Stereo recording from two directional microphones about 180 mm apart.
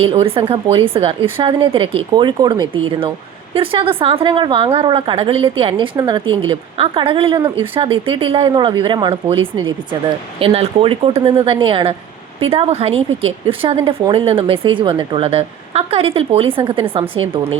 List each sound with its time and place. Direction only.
0.0 s a woman's voice: 30° right (ahead or behind)